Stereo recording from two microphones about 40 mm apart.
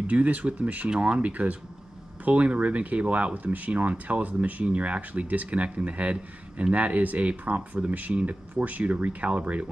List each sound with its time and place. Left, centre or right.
0.0 s speech: right
0.8 s speech: right
1.2 s speech: right